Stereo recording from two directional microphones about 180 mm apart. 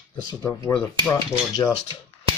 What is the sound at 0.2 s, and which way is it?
Speech, 20° left (ahead or behind).